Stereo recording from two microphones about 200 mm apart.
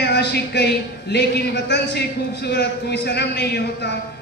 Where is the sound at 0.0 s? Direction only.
55° left (ahead or behind).